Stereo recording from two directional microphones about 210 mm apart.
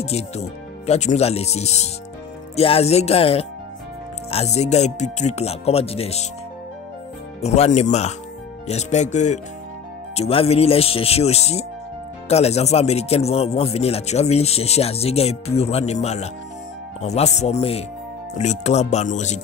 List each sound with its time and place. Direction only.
0.0 s music: 30° left (ahead or behind)
2.5 s speech: 30° left (ahead or behind)
4.3 s music: 30° left (ahead or behind)
7.4 s music: 30° left (ahead or behind)
10.1 s speech: 30° left (ahead or behind)
17.0 s music: 30° left (ahead or behind)